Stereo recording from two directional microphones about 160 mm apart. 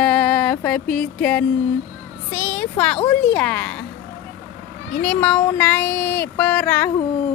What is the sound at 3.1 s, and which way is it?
Speech, 10° left (ahead or behind).